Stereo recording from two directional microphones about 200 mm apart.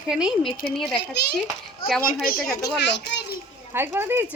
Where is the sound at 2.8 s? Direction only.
60° left (ahead or behind).